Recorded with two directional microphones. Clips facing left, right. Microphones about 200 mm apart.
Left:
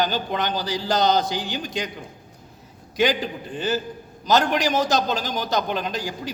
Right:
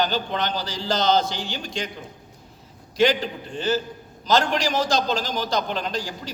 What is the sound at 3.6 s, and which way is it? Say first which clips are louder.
A man's voice: right 1 dB; 15° left (ahead or behind).